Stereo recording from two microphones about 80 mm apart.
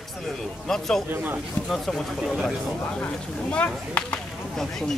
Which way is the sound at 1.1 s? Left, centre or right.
Right.